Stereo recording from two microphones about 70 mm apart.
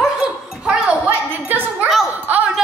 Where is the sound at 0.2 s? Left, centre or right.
Centre.